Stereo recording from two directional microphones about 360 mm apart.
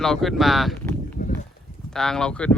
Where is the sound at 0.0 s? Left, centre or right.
Centre.